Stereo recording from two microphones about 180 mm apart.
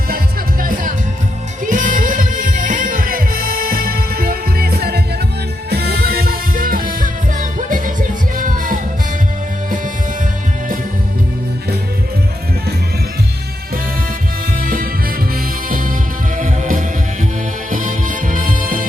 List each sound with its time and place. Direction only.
1.6 s music: 45° right (ahead or behind)
16.4 s music: 45° right (ahead or behind)